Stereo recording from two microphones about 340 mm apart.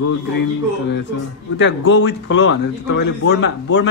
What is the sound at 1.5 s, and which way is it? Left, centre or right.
Speech, left.